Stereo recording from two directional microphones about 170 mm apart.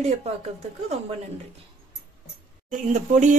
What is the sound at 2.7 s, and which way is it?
Speech, 50° right (ahead or behind).